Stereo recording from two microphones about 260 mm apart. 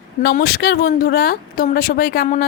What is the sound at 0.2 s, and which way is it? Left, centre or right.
Speech, left.